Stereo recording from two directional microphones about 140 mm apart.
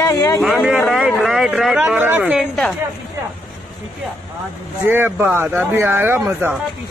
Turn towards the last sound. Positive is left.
turn(degrees=-15)  # may be behind; listen again after turning